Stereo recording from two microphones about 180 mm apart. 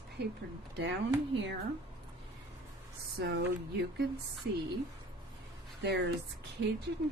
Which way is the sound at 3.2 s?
65° right (ahead or behind).